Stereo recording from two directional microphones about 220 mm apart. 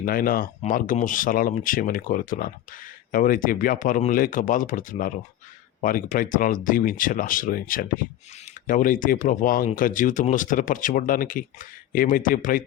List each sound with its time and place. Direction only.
0.0 s speech: 40° left (ahead or behind)